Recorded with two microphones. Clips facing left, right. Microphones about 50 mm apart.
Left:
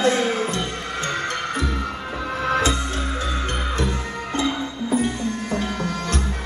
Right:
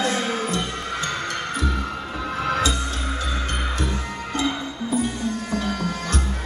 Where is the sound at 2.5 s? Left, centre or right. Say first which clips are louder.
Left 3 dB; left.